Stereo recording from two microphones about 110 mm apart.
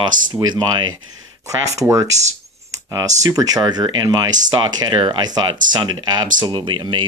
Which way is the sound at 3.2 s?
35° right (ahead or behind).